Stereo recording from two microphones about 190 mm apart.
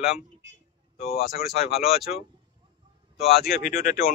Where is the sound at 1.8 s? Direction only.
Centre (ahead or behind).